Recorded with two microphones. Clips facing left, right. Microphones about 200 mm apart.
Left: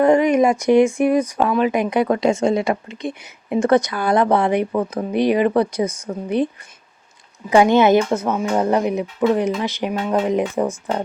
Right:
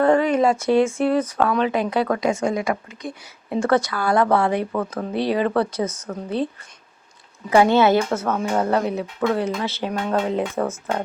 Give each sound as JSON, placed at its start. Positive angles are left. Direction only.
{"t": 0.0, "sound": "speech", "side_deg": 15}
{"t": 7.5, "sound": "speech", "side_deg": 15}